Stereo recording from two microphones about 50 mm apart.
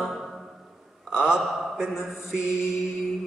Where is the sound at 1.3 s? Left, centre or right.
Centre.